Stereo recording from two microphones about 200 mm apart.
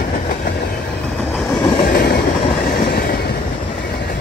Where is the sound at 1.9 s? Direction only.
50° left (ahead or behind).